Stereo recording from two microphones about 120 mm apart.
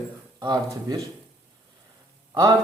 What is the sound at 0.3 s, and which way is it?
Speech, 35° right (ahead or behind).